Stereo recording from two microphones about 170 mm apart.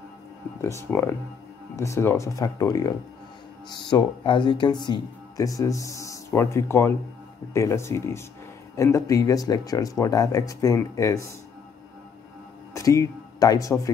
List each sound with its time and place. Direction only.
0.6 s speech: 15° left (ahead or behind)
3.9 s speech: 30° left (ahead or behind)
12.7 s speech: 20° left (ahead or behind)